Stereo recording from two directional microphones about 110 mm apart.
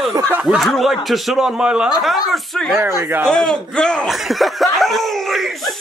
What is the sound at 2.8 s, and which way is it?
Speech, 20° right (ahead or behind).